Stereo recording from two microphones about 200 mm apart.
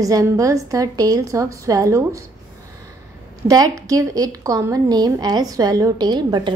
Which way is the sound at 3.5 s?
20° right (ahead or behind).